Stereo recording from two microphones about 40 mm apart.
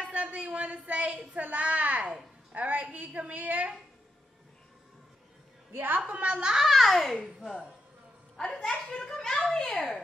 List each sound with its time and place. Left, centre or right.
0.0 s a woman's voice: right
5.7 s a woman's voice: right
6.0 s a woman's voice: right
6.5 s a child's voice: centre
8.6 s a child's voice: centre